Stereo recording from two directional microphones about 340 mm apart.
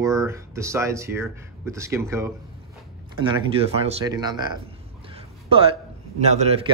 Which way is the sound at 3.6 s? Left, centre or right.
Centre.